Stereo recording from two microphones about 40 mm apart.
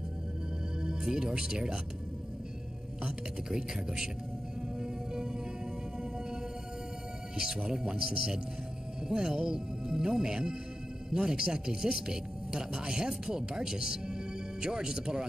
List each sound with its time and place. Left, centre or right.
0.7 s speech: centre
3.0 s speech: centre
4.7 s music: centre
7.3 s speech: centre